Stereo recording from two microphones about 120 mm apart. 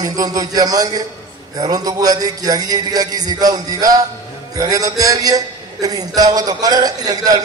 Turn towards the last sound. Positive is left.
turn(degrees=-35)  # may be behind; listen again after turning